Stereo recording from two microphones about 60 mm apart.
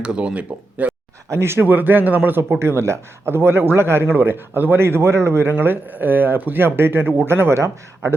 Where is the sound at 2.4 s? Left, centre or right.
Right.